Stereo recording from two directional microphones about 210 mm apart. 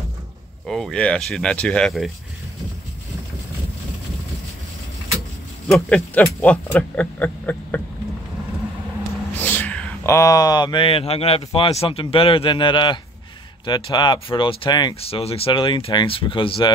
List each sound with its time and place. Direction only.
0.7 s speech: centre (ahead or behind)
5.7 s speech: 5° left (ahead or behind)
9.4 s speech: 10° left (ahead or behind)